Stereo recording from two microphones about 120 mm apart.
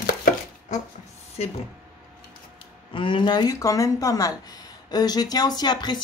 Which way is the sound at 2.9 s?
40° left (ahead or behind).